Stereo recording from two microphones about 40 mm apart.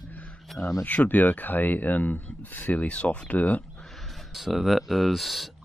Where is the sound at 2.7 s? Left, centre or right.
Left.